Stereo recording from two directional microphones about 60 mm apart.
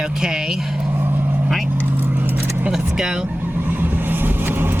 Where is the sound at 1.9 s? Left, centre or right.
Right.